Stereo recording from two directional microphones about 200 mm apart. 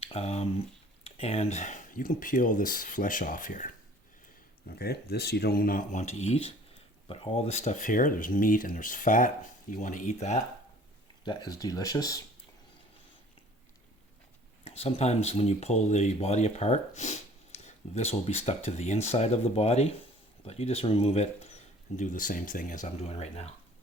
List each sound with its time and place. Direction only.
0.0 s speech: 30° left (ahead or behind)
11.3 s speech: 20° left (ahead or behind)
14.6 s speech: 30° left (ahead or behind)